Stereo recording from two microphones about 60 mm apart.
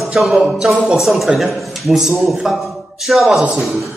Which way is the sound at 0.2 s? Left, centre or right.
Centre.